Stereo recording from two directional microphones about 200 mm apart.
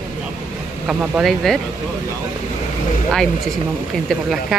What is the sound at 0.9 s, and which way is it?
Speech, centre (ahead or behind).